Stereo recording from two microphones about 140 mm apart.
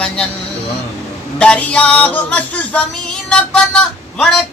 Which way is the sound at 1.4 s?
10° left (ahead or behind).